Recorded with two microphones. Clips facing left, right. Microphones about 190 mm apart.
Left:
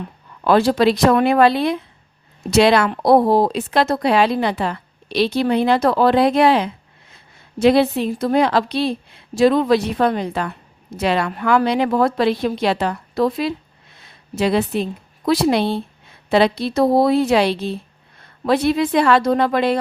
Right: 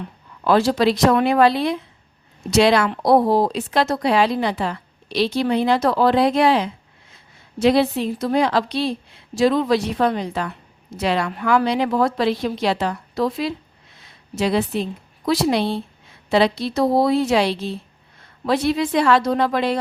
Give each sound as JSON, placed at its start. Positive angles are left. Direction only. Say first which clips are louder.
{"t": 0.4, "sound": "speech", "louder": "left 2 dB", "side_deg": 55}